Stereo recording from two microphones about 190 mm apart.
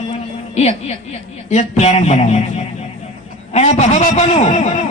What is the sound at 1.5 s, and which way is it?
Speech, 35° left (ahead or behind).